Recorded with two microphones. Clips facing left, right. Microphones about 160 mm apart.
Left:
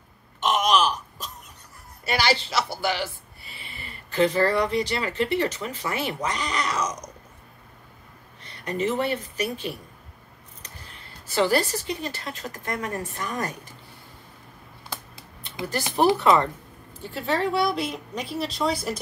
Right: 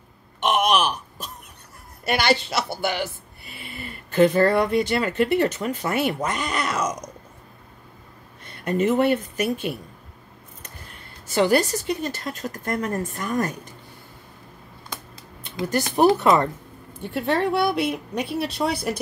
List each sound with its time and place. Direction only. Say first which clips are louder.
0.4 s groan: right 1 dB; 60° right (ahead or behind)
2.0 s a woman's voice: right 3 dB; 55° right (ahead or behind)
8.5 s a woman's voice: right 5 dB; 50° right (ahead or behind)
11.7 s a woman's voice: right 4 dB; 45° right (ahead or behind)
15.4 s a woman's voice: right 5 dB; 50° right (ahead or behind)
17.0 s speech: right 3 dB; 60° right (ahead or behind)